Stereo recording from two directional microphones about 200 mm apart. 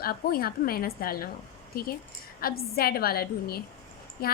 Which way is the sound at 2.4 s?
50° left (ahead or behind).